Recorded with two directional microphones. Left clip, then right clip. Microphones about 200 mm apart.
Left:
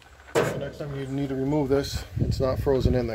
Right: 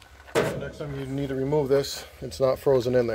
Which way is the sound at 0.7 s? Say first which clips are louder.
Even; 30° right (ahead or behind).